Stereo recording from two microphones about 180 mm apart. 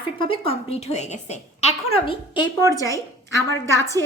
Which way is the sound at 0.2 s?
30° left (ahead or behind).